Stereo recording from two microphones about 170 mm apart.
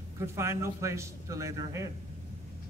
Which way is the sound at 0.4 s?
15° right (ahead or behind).